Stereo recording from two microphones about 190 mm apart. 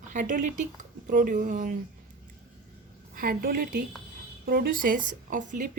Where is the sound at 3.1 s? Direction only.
50° right (ahead or behind).